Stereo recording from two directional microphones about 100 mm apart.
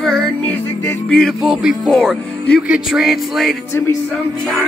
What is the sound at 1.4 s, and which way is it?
Speech, 5° right (ahead or behind).